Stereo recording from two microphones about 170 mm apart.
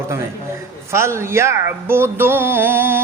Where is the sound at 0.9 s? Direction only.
15° right (ahead or behind).